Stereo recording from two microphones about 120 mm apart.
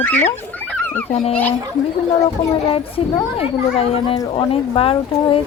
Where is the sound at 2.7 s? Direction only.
50° left (ahead or behind).